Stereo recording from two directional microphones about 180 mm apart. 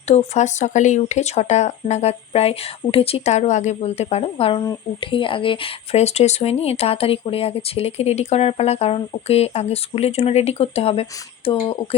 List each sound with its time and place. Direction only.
0.1 s speech: 40° left (ahead or behind)